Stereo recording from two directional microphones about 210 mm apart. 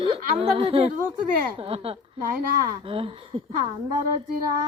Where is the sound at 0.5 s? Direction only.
25° right (ahead or behind).